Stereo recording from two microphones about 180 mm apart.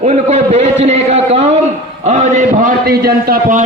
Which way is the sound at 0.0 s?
40° right (ahead or behind).